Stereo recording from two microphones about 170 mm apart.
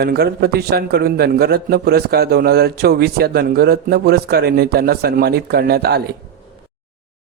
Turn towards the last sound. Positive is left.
turn(degrees=-70)  # may be behind; listen again after turning